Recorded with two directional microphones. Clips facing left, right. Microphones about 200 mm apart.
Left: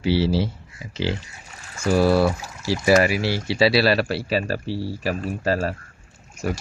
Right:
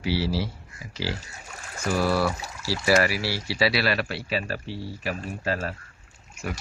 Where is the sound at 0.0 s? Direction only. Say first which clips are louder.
Left 6 dB; 25° left (ahead or behind).